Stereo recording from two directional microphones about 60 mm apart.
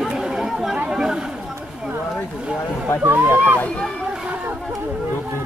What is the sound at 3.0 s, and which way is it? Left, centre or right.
Speech, right.